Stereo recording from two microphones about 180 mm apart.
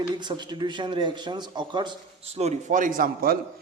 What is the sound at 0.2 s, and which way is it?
A man's voice, 25° right (ahead or behind).